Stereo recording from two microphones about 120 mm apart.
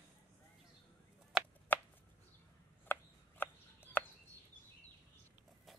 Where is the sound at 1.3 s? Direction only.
5° right (ahead or behind).